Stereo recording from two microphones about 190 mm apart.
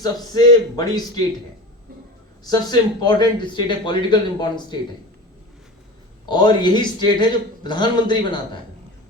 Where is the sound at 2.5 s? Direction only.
20° left (ahead or behind).